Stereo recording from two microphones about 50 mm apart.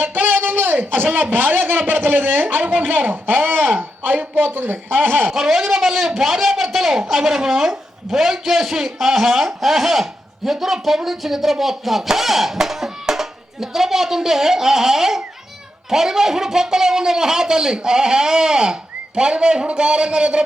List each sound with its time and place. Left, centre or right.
0.0 s a sound: right
0.9 s speech: right
5.3 s speech: centre